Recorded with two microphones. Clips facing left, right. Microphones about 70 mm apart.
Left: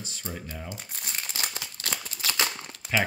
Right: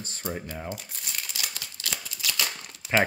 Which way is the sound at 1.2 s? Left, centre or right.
Left.